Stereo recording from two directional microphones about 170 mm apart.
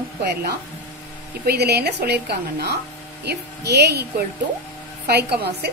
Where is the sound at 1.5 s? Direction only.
70° right (ahead or behind).